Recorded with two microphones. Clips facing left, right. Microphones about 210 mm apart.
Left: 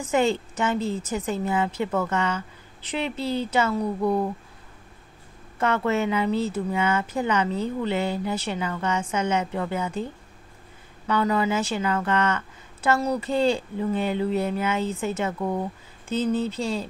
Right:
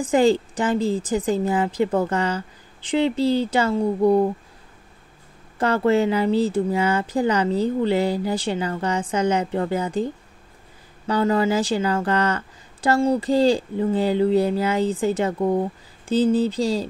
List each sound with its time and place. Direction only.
0.0 s speech: 35° right (ahead or behind)
5.6 s speech: 35° right (ahead or behind)